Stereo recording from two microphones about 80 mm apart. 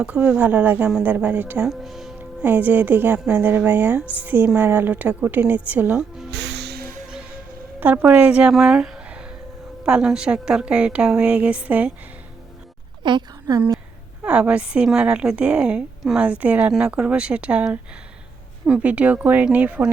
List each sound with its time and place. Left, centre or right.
0.0 s a woman's voice: centre
1.6 s speech: centre
2.4 s a woman's voice: right
7.8 s a woman's voice: right
13.0 s a woman's voice: right
14.3 s a woman's voice: centre